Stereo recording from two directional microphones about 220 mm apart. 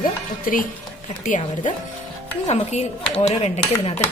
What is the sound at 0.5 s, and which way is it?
Speech, 35° left (ahead or behind).